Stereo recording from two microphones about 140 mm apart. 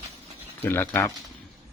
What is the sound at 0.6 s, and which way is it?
Speech, 15° left (ahead or behind).